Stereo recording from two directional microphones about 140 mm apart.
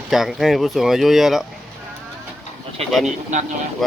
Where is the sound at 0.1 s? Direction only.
Centre (ahead or behind).